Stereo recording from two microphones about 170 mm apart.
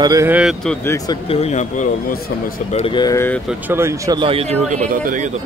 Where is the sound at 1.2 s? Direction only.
40° left (ahead or behind).